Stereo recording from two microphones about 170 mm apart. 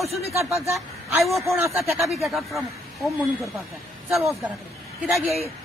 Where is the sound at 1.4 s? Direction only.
15° right (ahead or behind).